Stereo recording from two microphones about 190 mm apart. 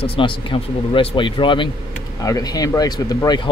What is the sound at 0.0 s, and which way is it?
Speech, 25° left (ahead or behind).